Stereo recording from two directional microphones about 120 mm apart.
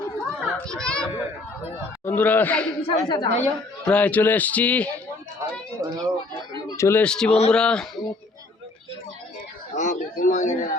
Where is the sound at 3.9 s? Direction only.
10° left (ahead or behind).